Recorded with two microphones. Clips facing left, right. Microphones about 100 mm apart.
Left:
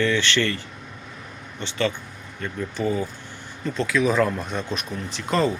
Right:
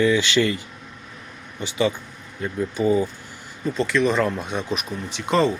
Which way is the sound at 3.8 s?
5° left (ahead or behind).